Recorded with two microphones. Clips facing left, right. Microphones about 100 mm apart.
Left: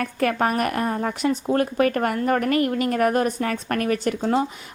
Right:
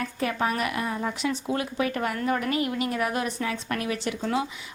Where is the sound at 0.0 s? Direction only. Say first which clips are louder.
Left 5 dB; 55° left (ahead or behind).